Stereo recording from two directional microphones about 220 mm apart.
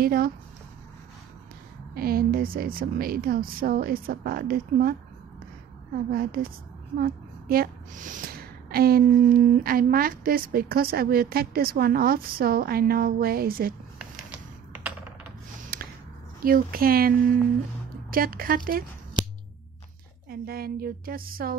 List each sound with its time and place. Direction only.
0.0 s a woman's voice: 40° right (ahead or behind)
2.0 s speech: 45° right (ahead or behind)
6.1 s a woman's voice: 40° right (ahead or behind)
15.7 s a sound: 40° right (ahead or behind)
16.3 s speech: 40° right (ahead or behind)
18.1 s speech: 40° right (ahead or behind)
20.2 s a woman's voice: 45° right (ahead or behind)